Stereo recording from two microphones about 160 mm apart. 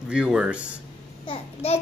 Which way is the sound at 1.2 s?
40° left (ahead or behind).